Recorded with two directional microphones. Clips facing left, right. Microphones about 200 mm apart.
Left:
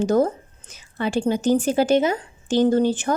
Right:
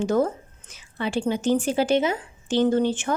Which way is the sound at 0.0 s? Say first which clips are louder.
Left 3 dB; 40° left (ahead or behind).